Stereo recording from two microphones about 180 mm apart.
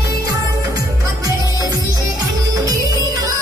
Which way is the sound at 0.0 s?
20° right (ahead or behind).